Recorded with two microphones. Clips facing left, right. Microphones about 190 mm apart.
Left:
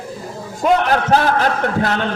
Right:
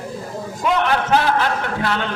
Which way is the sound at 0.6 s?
40° left (ahead or behind).